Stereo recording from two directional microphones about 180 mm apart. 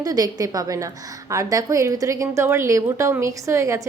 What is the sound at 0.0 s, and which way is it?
A woman's voice, 20° right (ahead or behind).